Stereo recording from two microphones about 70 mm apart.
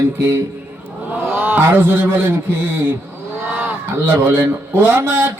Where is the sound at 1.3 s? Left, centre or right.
Centre.